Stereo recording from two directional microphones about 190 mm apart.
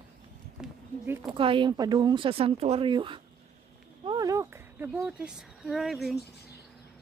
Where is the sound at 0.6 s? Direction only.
10° right (ahead or behind).